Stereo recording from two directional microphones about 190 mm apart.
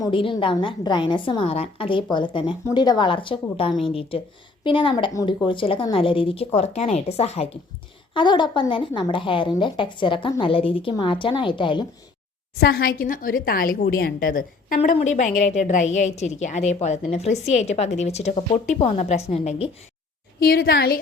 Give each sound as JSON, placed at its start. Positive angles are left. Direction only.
{"t": 0.0, "sound": "a woman's voice", "side_deg": 25}
{"t": 12.5, "sound": "a woman's voice", "side_deg": 55}
{"t": 14.8, "sound": "a woman's voice", "side_deg": 35}
{"t": 20.4, "sound": "a woman's voice", "side_deg": 50}